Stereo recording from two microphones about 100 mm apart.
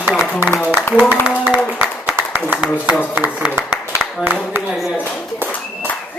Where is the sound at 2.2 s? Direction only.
20° right (ahead or behind).